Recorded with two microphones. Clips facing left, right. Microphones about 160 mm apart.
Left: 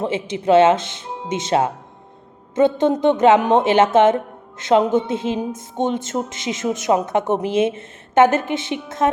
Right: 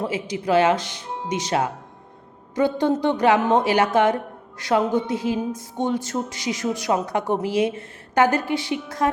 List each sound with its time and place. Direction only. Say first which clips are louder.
0.0 s a woman's voice: left 4 dB; 25° left (ahead or behind)